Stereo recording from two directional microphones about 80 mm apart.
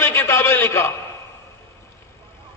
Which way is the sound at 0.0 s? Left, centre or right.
Left.